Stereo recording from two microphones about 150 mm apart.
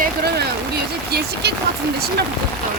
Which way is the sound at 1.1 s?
90° right.